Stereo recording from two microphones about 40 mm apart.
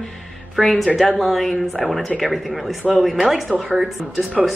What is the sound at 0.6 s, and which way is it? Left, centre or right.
Speech, centre.